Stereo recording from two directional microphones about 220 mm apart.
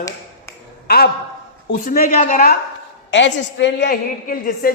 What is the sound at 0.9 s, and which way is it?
A man's voice, 45° left (ahead or behind).